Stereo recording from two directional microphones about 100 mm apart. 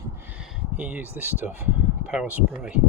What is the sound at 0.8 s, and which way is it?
Speech, 15° right (ahead or behind).